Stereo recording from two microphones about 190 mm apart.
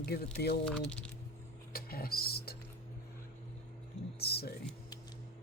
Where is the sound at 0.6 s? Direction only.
5° left (ahead or behind).